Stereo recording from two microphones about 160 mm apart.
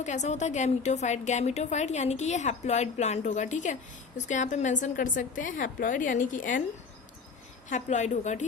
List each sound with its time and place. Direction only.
0.0 s a woman's voice: 50° left (ahead or behind)
7.7 s a woman's voice: 50° left (ahead or behind)